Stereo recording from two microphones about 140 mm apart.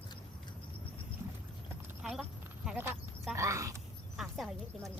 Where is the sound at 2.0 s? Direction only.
5° right (ahead or behind).